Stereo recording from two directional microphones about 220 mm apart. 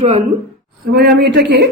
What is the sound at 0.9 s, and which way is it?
Speech, 45° right (ahead or behind).